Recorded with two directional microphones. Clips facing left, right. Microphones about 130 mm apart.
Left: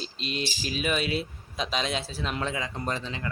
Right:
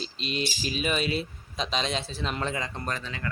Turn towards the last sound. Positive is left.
turn(degrees=25)  # may be behind; listen again after turning